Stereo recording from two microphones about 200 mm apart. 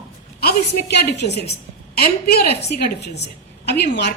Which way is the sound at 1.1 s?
55° left (ahead or behind).